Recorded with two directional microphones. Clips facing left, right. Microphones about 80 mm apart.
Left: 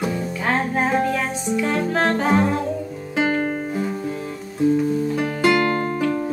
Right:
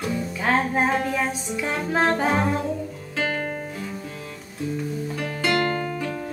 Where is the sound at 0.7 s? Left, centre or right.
Centre.